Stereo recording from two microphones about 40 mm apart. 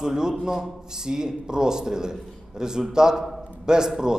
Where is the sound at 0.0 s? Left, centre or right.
Centre.